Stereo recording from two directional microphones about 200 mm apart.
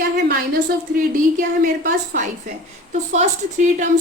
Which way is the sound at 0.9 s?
45° right (ahead or behind).